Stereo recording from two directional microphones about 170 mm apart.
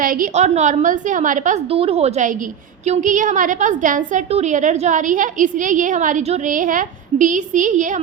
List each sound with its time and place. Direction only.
0.0 s a woman's voice: 55° right (ahead or behind)
1.7 s a woman's voice: 35° right (ahead or behind)